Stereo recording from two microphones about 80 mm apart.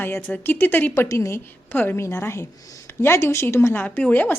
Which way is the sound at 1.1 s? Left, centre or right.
Left.